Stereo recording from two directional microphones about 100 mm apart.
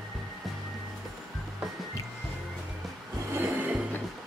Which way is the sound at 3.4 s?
15° right (ahead or behind).